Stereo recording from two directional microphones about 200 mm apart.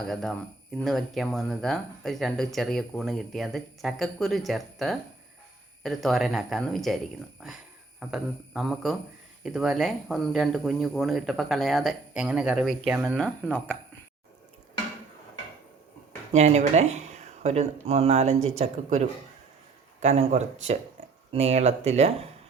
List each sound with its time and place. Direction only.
0.0 s speech: centre (ahead or behind)
16.3 s speech: 35° right (ahead or behind)